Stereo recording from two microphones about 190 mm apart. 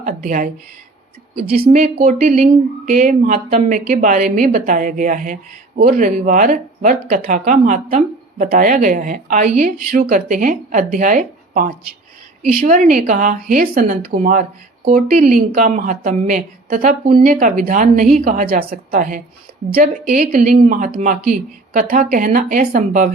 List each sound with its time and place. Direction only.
0.0 s speech: 45° right (ahead or behind)
1.7 s speech: 45° right (ahead or behind)